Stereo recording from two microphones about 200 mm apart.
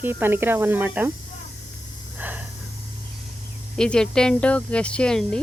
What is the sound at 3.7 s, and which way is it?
Speech, 5° left (ahead or behind).